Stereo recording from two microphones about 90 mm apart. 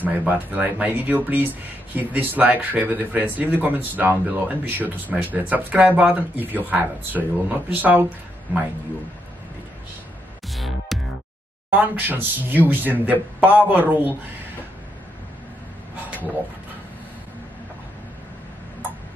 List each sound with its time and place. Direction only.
0.0 s speech: 20° right (ahead or behind)
10.5 s music: centre (ahead or behind)
11.7 s speech: 20° right (ahead or behind)